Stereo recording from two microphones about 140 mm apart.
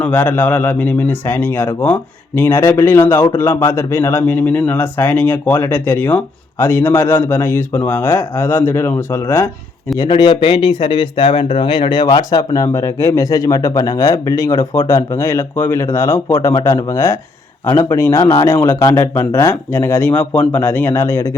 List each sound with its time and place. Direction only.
0.0 s a man's voice: 10° left (ahead or behind)
10.1 s a man's voice: 35° left (ahead or behind); by 21.3 s 15° left (ahead or behind)